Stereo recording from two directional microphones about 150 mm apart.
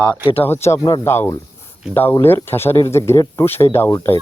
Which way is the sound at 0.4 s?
15° left (ahead or behind).